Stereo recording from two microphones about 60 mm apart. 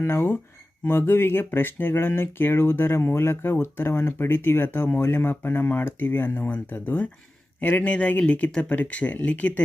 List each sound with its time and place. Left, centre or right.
0.0 s speech: left